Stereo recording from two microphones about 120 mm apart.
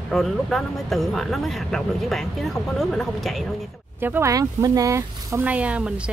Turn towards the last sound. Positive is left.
turn(degrees=-10)  # may be behind; listen again after turning